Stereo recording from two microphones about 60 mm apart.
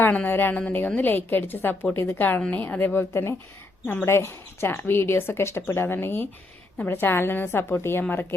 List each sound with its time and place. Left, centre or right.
0.0 s a woman's voice: left
3.1 s a woman's voice: left